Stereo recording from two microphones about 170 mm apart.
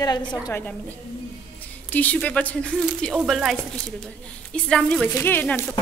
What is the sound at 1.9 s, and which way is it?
Speech, 10° left (ahead or behind).